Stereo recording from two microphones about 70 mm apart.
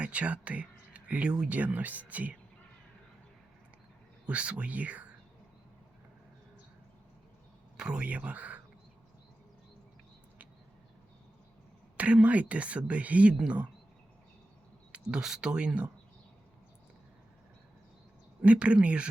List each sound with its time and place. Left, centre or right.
0.0 s speech: centre
4.3 s speech: centre
7.8 s speech: centre
11.9 s speech: centre
14.9 s speech: centre
18.4 s speech: centre